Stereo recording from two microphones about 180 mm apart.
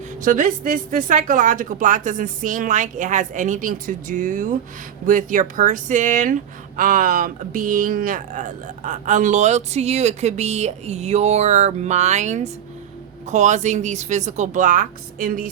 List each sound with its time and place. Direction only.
0.2 s a woman's voice: 45° right (ahead or behind)